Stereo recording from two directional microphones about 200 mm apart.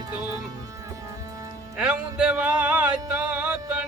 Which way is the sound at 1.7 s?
5° right (ahead or behind).